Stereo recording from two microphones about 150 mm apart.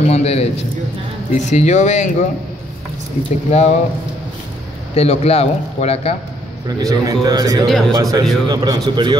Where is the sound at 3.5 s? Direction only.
50° left (ahead or behind).